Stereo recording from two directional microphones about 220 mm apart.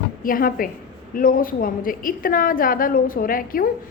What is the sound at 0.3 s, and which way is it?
A woman's voice, 40° left (ahead or behind).